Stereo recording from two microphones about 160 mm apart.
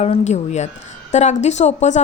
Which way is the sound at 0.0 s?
45° left (ahead or behind).